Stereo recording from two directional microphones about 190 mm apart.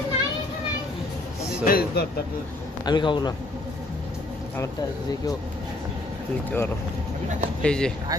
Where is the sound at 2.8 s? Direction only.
25° left (ahead or behind).